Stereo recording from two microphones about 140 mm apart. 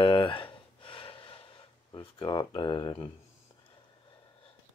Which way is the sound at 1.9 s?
35° left (ahead or behind).